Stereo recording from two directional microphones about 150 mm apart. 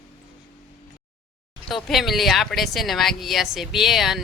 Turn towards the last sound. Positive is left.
turn(degrees=0)  # may be behind; listen again after turning